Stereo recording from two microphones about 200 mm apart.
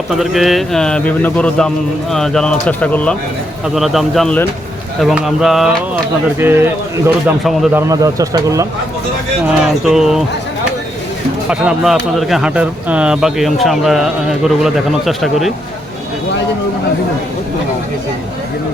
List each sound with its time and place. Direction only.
0.1 s speech: centre (ahead or behind); by 8.6 s 15° right (ahead or behind)
9.8 s speech: centre (ahead or behind)
11.4 s speech: 5° right (ahead or behind)